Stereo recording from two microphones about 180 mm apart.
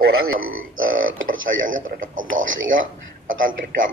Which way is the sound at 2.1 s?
90° right.